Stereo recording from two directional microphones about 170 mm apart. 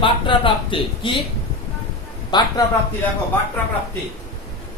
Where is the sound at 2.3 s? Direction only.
25° left (ahead or behind).